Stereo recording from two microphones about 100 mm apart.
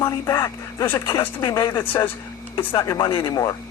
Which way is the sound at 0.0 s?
35° left (ahead or behind).